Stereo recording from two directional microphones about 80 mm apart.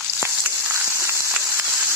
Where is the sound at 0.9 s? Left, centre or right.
Right.